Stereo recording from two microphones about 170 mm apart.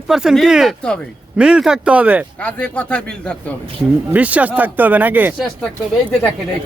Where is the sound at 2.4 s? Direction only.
5° left (ahead or behind).